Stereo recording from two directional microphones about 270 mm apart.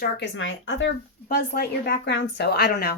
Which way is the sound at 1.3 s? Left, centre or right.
Left.